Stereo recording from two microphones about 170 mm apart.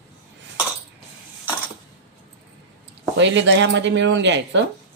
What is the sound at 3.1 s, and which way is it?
Speech, 90° right.